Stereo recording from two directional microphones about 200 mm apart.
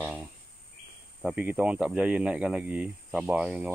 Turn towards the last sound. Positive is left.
turn(degrees=-5)  # may be behind; listen again after turning